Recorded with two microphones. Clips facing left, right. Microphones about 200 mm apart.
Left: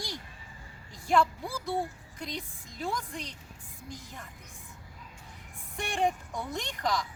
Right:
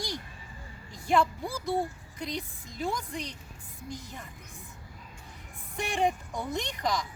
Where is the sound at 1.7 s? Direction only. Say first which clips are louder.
Right 3 dB; centre (ahead or behind).